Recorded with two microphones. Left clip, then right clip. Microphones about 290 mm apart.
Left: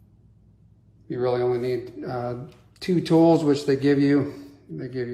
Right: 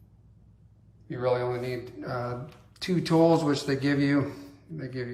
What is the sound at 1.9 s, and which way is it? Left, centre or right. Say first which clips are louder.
Speech: left 3 dB; centre.